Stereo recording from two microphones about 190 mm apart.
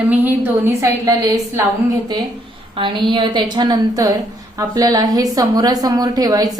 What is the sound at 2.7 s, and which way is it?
A woman's voice, 25° right (ahead or behind).